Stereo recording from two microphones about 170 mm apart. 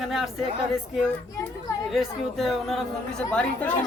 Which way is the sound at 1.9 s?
Centre (ahead or behind).